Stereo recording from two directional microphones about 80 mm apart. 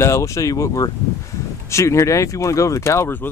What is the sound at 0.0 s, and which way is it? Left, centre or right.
Speech, left.